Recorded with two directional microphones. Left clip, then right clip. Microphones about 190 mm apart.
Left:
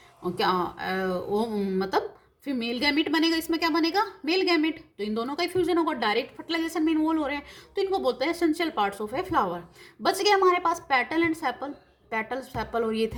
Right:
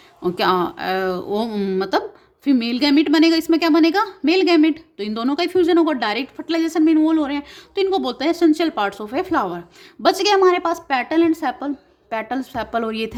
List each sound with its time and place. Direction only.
0.2 s a woman's voice: 45° right (ahead or behind)